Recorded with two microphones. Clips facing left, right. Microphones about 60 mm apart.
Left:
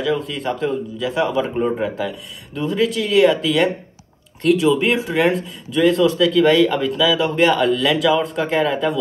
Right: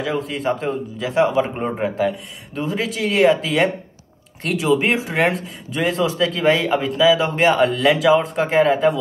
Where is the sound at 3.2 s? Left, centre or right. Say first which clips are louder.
Left 1 dB; right.